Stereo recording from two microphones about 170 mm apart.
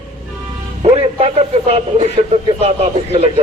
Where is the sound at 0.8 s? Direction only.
40° right (ahead or behind).